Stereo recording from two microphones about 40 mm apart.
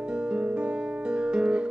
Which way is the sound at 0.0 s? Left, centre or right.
Right.